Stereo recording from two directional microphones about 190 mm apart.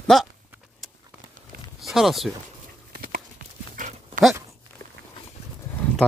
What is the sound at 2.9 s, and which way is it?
Clip-clop, 50° right (ahead or behind).